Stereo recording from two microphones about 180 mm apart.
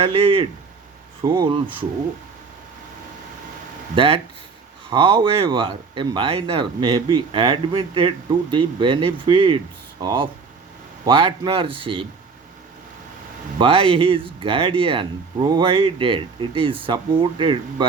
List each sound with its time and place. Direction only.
0.0 s speech: 30° right (ahead or behind)
3.9 s speech: 30° right (ahead or behind)
13.6 s speech: 30° right (ahead or behind)